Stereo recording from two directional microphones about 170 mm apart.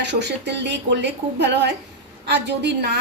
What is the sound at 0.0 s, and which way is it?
A woman's voice, 90° right.